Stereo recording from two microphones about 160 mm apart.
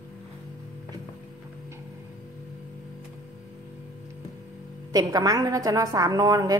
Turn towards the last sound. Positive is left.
turn(degrees=-20)  # may be behind; listen again after turning